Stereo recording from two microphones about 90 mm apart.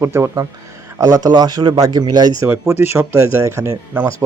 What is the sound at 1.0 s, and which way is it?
Speech, 40° right (ahead or behind).